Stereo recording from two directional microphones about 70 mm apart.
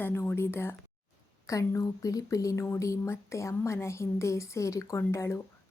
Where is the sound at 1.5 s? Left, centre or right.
Left.